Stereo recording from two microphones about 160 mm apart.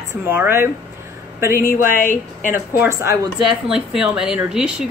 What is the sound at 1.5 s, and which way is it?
Speech, 60° left (ahead or behind).